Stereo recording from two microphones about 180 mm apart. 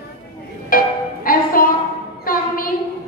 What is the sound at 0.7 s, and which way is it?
Music, 50° left (ahead or behind).